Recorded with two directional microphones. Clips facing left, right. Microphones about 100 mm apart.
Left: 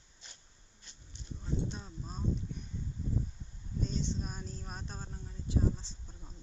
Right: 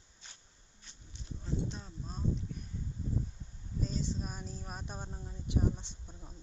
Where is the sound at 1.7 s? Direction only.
Centre (ahead or behind).